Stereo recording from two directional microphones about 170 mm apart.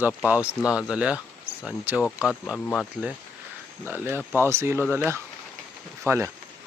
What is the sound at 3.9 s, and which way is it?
Speech, 10° right (ahead or behind).